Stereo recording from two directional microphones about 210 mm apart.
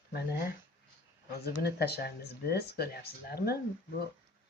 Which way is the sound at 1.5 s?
50° left (ahead or behind).